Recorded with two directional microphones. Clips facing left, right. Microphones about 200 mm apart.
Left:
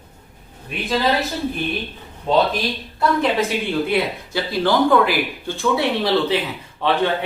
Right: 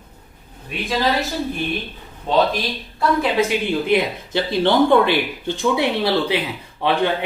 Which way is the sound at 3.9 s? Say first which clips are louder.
Right 2 dB; 20° right (ahead or behind).